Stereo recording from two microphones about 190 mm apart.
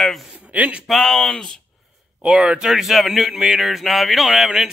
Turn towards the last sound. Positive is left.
turn(degrees=0)  # may be behind; listen again after turning